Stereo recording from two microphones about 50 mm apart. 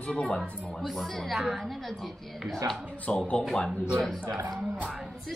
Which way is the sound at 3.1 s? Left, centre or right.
Left.